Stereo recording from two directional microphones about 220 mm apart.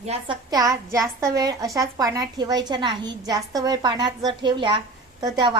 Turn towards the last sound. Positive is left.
turn(degrees=-20)  # may be behind; listen again after turning